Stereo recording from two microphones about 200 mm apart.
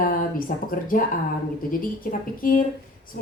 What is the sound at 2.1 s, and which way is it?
A woman's voice, 45° left (ahead or behind).